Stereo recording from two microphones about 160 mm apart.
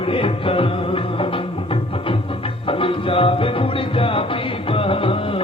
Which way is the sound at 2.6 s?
35° left (ahead or behind).